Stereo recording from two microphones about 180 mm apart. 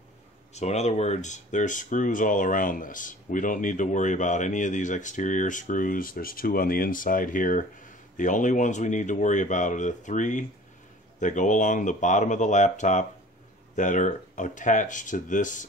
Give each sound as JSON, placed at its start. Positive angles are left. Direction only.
{"t": 0.6, "sound": "speech", "side_deg": 40}